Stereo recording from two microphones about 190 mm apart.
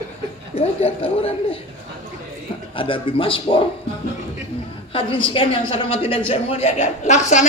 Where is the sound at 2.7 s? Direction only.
25° left (ahead or behind).